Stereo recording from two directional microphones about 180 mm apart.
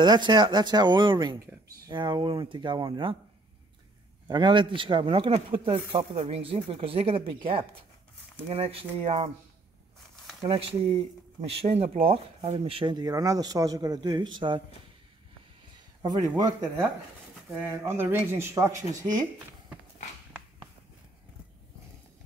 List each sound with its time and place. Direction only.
0.0 s speech: 25° right (ahead or behind)
4.3 s speech: 25° right (ahead or behind)
10.4 s speech: 30° right (ahead or behind)
16.0 s speech: 20° right (ahead or behind)
17.6 s speech: 15° right (ahead or behind)